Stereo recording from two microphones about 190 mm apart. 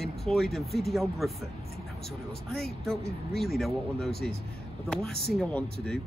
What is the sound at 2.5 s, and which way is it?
Speech, centre (ahead or behind).